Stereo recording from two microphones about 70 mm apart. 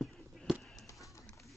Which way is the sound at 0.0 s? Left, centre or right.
Centre.